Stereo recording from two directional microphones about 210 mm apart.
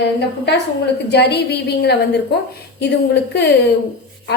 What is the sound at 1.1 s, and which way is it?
Speech, 50° left (ahead or behind).